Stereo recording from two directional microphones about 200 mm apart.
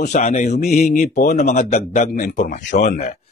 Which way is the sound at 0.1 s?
35° left (ahead or behind).